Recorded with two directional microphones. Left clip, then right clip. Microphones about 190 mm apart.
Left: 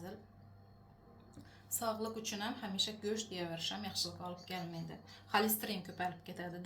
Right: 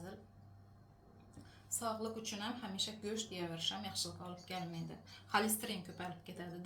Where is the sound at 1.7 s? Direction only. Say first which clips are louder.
Left 2 dB; 40° left (ahead or behind).